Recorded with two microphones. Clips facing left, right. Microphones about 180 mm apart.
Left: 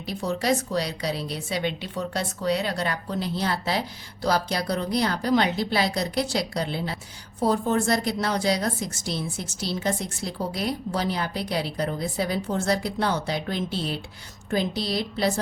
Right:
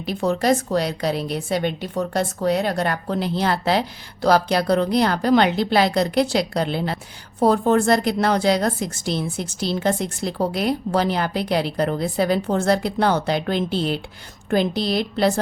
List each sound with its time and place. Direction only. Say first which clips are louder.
0.2 s speech: right 5 dB; 55° right (ahead or behind)
14.8 s speech: right 6 dB; 60° right (ahead or behind)